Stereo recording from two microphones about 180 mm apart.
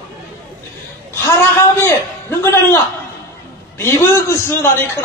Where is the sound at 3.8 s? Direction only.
15° left (ahead or behind).